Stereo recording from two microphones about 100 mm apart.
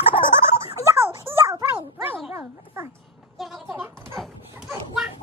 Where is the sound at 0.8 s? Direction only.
25° right (ahead or behind).